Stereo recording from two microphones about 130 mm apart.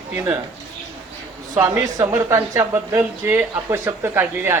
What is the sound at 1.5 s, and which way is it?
A woman's voice, 20° right (ahead or behind).